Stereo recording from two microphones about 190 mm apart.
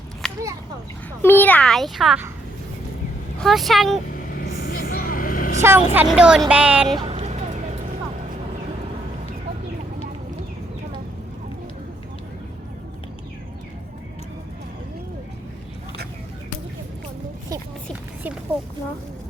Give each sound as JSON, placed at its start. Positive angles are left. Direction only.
{"t": 0.2, "sound": "a sound", "side_deg": 0}
{"t": 1.2, "sound": "a child's voice", "side_deg": 10}
{"t": 3.4, "sound": "speech", "side_deg": 0}
{"t": 4.6, "sound": "vehicle", "side_deg": 50}
{"t": 5.6, "sound": "speech", "side_deg": -10}
{"t": 7.1, "sound": "a sound", "side_deg": -35}